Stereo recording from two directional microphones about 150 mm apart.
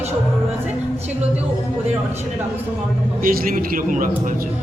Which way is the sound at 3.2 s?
70° right (ahead or behind).